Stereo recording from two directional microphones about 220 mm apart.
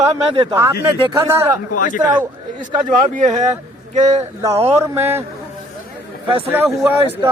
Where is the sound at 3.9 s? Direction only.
30° right (ahead or behind).